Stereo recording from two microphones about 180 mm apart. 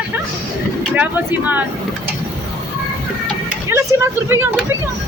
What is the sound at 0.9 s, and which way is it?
Speech, 10° right (ahead or behind).